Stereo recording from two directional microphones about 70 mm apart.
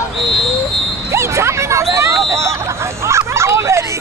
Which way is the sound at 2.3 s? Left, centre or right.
Right.